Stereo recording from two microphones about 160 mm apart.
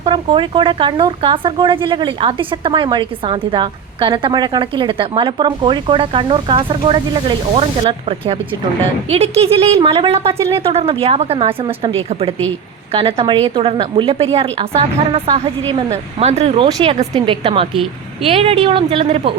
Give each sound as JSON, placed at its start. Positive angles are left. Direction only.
{"t": 0.0, "sound": "speech", "side_deg": -30}